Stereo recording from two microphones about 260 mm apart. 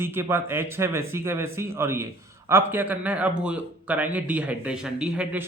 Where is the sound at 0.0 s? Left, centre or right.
Centre.